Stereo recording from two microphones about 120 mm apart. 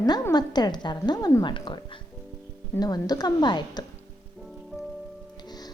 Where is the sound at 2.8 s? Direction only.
35° left (ahead or behind).